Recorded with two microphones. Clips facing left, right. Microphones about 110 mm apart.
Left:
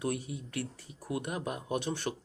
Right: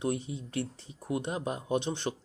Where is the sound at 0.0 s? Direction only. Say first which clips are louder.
Right 2 dB; 25° right (ahead or behind).